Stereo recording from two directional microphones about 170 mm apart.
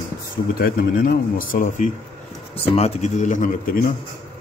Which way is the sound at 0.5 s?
60° left (ahead or behind).